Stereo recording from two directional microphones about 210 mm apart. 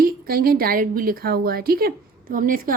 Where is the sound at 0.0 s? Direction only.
45° right (ahead or behind).